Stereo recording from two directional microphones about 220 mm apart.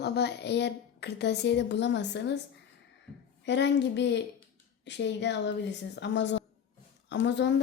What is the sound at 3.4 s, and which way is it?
A woman's voice, 55° left (ahead or behind).